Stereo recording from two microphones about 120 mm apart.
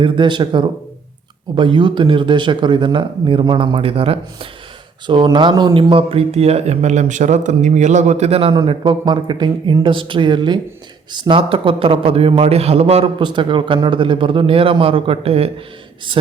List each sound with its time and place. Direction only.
0.0 s speech: 40° right (ahead or behind)
5.0 s a man's voice: 40° right (ahead or behind); by 13.1 s 55° right (ahead or behind)
13.1 s a man's voice: 40° right (ahead or behind)